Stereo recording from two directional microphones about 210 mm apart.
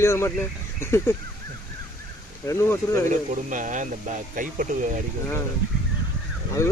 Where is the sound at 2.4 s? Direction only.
15° left (ahead or behind).